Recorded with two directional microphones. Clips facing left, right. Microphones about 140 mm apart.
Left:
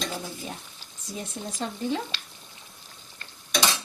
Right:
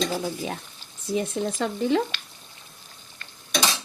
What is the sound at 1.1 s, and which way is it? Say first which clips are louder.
Speech: right 10 dB; 90° right.